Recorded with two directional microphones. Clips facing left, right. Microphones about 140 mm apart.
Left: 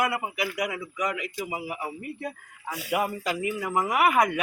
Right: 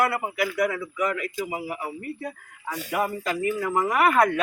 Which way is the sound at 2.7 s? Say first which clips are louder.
Right 1 dB; 10° left (ahead or behind).